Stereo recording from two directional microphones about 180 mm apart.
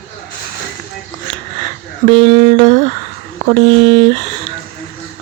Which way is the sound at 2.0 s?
30° right (ahead or behind).